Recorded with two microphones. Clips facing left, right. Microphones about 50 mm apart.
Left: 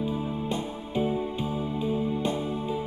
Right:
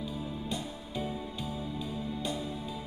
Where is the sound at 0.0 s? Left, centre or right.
Left.